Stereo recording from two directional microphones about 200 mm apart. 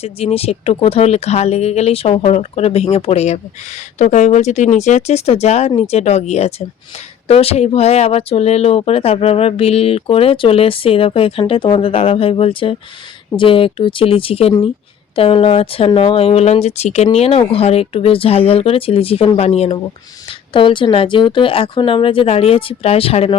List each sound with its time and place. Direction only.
0.0 s speech: 30° left (ahead or behind)